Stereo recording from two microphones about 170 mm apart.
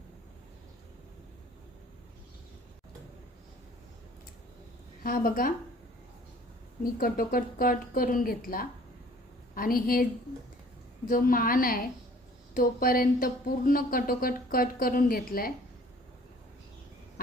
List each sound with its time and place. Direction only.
5.0 s speech: 55° left (ahead or behind)
6.8 s speech: 55° left (ahead or behind)
11.1 s speech: 55° left (ahead or behind)